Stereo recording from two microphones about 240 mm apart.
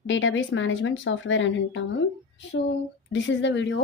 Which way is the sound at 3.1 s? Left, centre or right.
Left.